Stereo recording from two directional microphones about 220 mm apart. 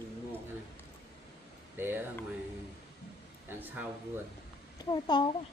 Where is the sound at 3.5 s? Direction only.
10° right (ahead or behind).